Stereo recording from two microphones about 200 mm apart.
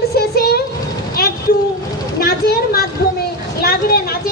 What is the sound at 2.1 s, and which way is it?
A woman's voice, 50° left (ahead or behind).